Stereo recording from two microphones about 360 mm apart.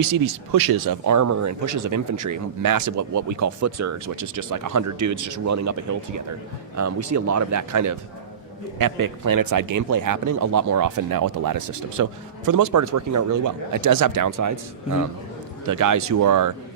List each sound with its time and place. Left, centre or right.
0.1 s speech: right
1.0 s speech: right
6.7 s a man's voice: right
14.3 s a man's voice: right